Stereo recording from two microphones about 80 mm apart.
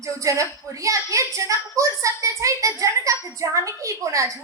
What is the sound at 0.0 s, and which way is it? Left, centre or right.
A woman's voice, right.